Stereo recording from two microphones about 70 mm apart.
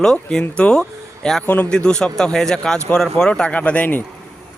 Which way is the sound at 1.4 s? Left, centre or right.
Left.